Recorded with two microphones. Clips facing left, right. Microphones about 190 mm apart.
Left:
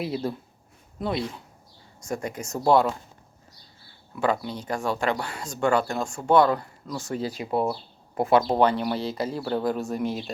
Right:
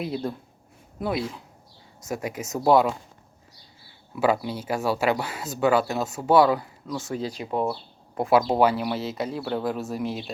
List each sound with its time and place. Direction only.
0.0 s speech: centre (ahead or behind)
4.1 s speech: 5° right (ahead or behind)